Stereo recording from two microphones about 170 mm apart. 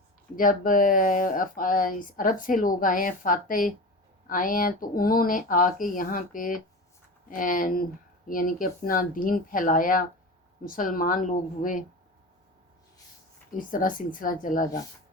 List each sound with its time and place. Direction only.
0.3 s speech: 55° left (ahead or behind)
13.6 s speech: 50° left (ahead or behind)